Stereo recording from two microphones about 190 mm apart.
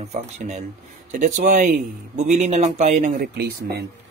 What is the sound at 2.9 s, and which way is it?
Speech, 55° right (ahead or behind).